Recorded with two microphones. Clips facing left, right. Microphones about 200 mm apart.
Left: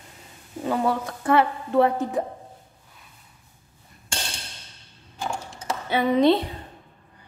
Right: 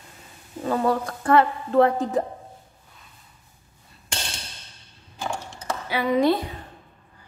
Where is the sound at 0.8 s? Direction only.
10° left (ahead or behind).